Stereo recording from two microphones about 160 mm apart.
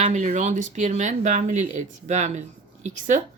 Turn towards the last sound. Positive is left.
turn(degrees=-50)  # may be behind; listen again after turning